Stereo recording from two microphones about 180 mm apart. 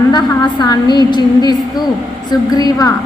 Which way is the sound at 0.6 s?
25° left (ahead or behind).